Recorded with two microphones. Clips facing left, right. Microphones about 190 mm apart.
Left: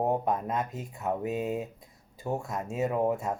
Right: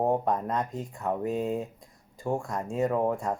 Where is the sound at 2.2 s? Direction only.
5° left (ahead or behind).